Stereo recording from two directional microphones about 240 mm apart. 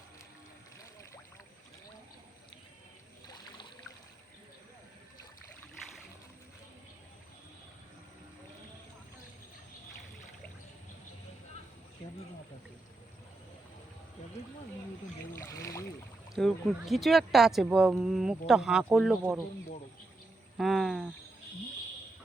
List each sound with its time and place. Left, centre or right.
3.2 s trickle: centre
15.3 s speech: centre
16.3 s speech: centre
20.6 s a sound: centre